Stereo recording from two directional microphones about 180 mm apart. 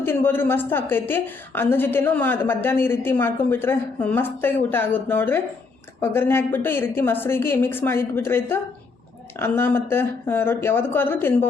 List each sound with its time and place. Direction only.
0.0 s a woman's voice: 10° left (ahead or behind)